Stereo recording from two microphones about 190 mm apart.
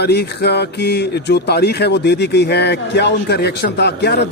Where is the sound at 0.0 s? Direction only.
60° left (ahead or behind).